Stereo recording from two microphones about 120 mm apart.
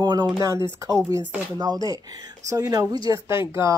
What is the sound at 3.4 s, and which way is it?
Speech, 40° left (ahead or behind).